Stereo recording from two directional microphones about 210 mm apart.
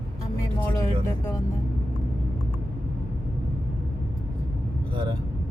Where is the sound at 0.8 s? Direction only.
15° left (ahead or behind).